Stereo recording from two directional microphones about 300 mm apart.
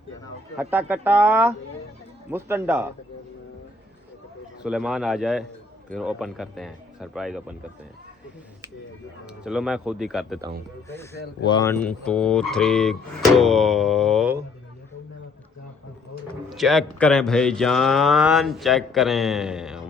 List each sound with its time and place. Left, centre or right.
0.6 s speech: centre
4.6 s speech: centre
9.2 s speech: centre
16.5 s speech: centre